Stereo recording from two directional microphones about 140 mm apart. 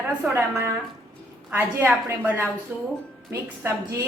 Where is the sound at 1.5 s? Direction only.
15° right (ahead or behind).